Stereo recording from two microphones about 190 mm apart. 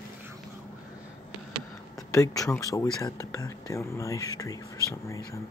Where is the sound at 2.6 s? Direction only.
15° left (ahead or behind).